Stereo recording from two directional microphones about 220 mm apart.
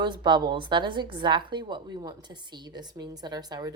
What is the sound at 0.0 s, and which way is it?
A woman's voice, 20° right (ahead or behind).